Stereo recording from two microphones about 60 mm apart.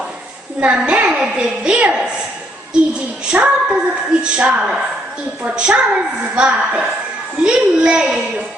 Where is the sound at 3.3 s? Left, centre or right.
Centre.